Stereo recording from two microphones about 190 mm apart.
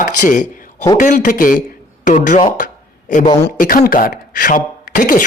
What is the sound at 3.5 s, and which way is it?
Speech, 50° left (ahead or behind).